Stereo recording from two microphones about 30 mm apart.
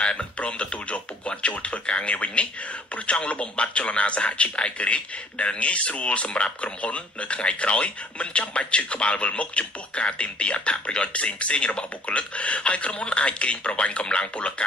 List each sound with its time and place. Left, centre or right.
0.0 s a man's voice: left